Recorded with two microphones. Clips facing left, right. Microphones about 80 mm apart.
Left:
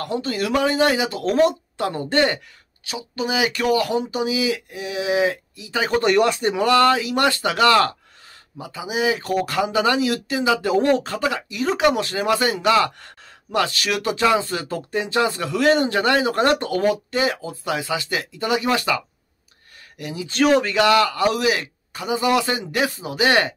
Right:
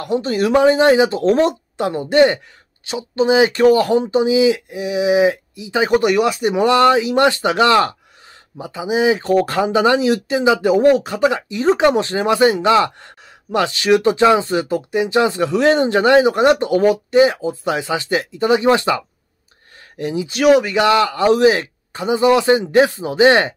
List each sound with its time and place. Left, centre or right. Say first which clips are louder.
0.0 s speech: right 6 dB; right
6.5 s speech: right 5 dB; right
20.2 s speech: right 4 dB; centre
20.7 s speech: right 2 dB; right